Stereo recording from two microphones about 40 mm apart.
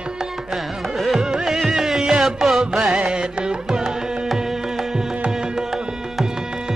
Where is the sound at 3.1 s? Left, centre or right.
Right.